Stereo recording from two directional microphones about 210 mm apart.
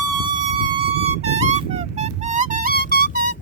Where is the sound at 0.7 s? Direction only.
30° right (ahead or behind).